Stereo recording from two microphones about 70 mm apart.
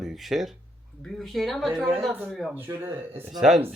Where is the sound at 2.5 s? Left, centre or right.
Right.